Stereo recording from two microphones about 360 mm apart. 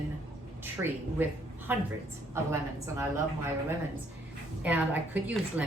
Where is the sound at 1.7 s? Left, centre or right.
Centre.